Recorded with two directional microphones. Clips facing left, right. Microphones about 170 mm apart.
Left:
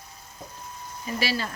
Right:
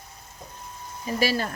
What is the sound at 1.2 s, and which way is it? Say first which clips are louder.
Speech: right 4 dB; 45° right (ahead or behind).